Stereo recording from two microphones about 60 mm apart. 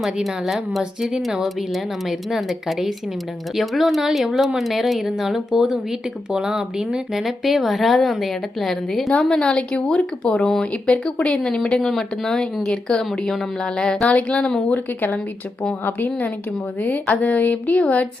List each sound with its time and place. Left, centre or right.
0.0 s speech: centre
9.0 s speech: centre
15.8 s a woman's voice: left